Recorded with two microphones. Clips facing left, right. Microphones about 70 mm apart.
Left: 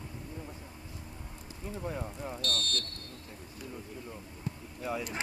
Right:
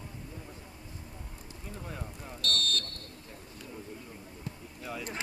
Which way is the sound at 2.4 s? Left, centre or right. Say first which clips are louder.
Right 4 dB; centre.